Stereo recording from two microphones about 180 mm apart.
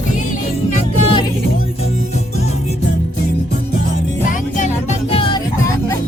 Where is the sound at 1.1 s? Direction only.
25° left (ahead or behind).